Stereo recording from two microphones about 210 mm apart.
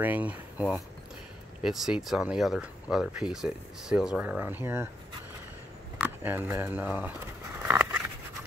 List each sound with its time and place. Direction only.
0.0 s speech: 10° right (ahead or behind)
5.9 s speech: 10° right (ahead or behind)
7.6 s a sound: 10° right (ahead or behind)